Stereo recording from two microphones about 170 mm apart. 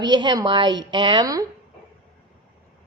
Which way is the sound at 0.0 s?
25° right (ahead or behind).